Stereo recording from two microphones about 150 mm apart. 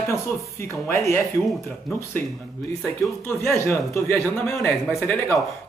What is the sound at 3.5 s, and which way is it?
Speech, 20° left (ahead or behind).